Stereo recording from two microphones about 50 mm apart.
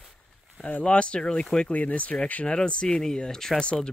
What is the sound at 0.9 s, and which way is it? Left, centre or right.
Speech, left.